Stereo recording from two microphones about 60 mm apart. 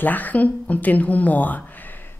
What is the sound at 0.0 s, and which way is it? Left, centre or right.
Speech, left.